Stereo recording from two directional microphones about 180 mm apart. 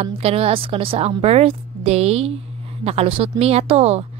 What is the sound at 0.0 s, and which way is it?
Speech, 35° right (ahead or behind).